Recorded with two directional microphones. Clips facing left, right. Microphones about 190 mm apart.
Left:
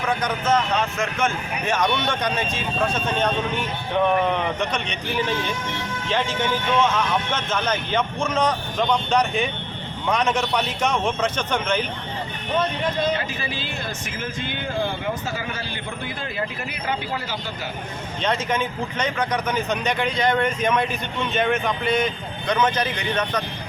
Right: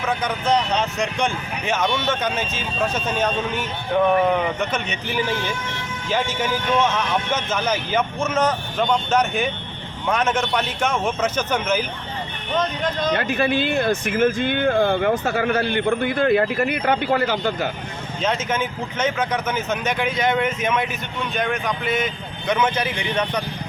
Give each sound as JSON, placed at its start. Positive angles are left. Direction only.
{"t": 0.0, "sound": "speech", "side_deg": -5}
{"t": 13.1, "sound": "speech", "side_deg": -60}
{"t": 18.2, "sound": "speech", "side_deg": -5}